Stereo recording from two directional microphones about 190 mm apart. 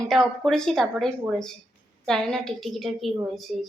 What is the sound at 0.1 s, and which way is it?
A woman's voice, centre (ahead or behind).